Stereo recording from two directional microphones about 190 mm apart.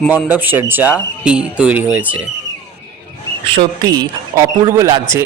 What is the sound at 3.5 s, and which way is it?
Speech, 25° right (ahead or behind).